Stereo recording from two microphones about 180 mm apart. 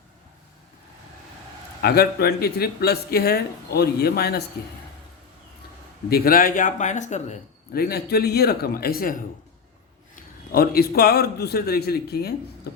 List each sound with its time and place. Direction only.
1.8 s speech: 60° left (ahead or behind)
6.1 s speech: 55° left (ahead or behind); by 7.4 s 40° left (ahead or behind)
7.7 s speech: 60° left (ahead or behind)
10.5 s speech: 55° left (ahead or behind)